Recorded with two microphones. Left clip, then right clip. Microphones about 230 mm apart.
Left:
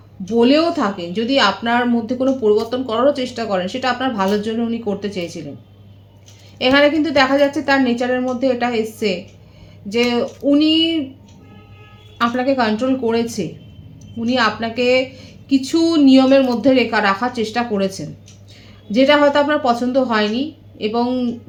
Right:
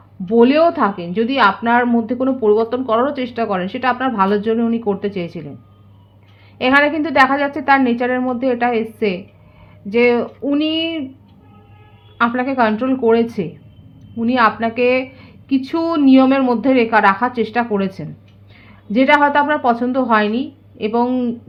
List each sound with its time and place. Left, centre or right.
0.3 s speech: right
6.6 s speech: right
12.1 s speech: right